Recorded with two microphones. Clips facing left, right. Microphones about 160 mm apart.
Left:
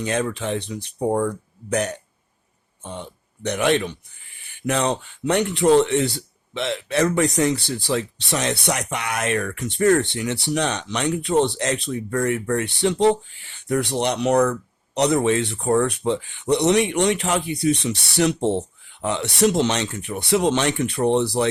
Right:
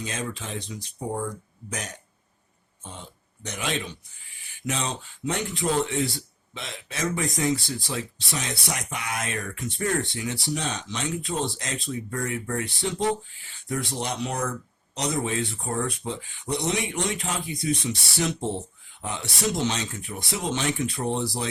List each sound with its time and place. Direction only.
0.0 s speech: 65° left (ahead or behind)